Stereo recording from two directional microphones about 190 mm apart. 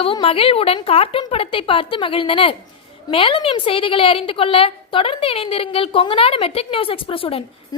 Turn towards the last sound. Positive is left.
turn(degrees=30)  # may be behind; listen again after turning